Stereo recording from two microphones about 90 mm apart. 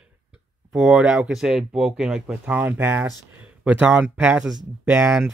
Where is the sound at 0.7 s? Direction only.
5° right (ahead or behind).